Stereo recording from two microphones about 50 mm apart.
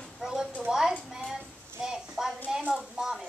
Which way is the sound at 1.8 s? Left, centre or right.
Centre.